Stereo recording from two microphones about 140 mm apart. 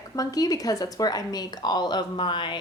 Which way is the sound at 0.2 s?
25° left (ahead or behind).